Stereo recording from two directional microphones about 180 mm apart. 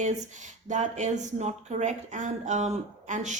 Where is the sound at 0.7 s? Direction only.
40° right (ahead or behind).